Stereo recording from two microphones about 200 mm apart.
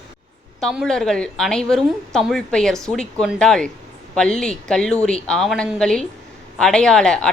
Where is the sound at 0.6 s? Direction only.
Centre (ahead or behind).